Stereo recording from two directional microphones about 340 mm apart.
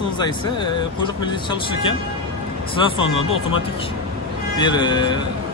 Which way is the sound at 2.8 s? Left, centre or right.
Centre.